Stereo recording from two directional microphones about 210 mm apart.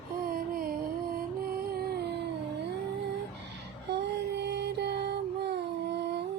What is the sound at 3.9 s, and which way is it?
Music, 55° right (ahead or behind).